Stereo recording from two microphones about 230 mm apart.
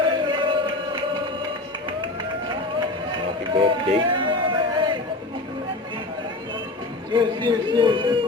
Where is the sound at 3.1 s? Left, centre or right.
Right.